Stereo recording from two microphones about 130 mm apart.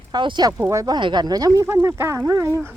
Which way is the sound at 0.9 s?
35° right (ahead or behind).